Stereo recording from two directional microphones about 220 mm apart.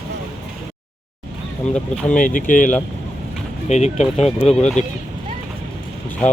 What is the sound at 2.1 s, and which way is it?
Speech, 35° left (ahead or behind).